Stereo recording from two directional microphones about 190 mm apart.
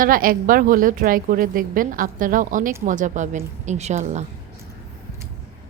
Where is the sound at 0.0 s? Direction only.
50° right (ahead or behind).